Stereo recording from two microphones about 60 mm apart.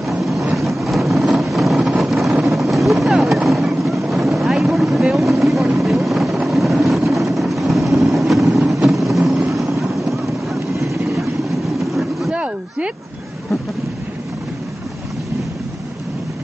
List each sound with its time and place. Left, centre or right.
0.1 s vehicle: centre
11.9 s vehicle: centre
12.3 s a sound: centre